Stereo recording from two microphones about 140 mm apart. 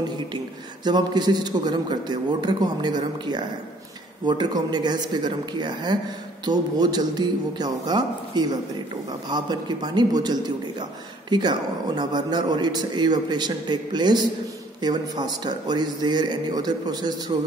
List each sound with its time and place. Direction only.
0.8 s a man's voice: 30° right (ahead or behind)